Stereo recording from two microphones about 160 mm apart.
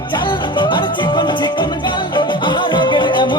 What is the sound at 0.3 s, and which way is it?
Music, 30° left (ahead or behind).